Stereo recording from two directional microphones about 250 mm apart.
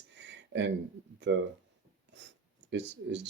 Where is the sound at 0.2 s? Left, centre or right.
Right.